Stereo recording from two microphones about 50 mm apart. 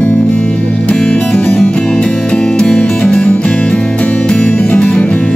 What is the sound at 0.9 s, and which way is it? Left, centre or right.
Music, centre.